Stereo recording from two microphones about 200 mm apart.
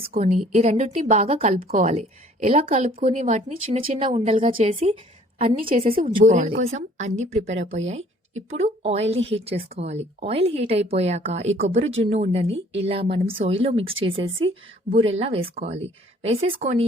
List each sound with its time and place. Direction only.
0.0 s a woman's voice: 40° right (ahead or behind)